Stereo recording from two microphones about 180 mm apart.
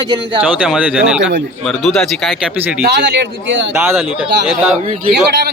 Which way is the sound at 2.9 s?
70° right (ahead or behind).